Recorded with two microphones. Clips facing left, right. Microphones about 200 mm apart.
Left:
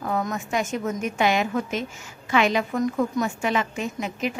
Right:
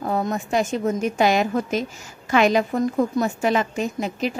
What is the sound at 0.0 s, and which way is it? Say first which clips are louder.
Speech: right 3 dB; 30° right (ahead or behind).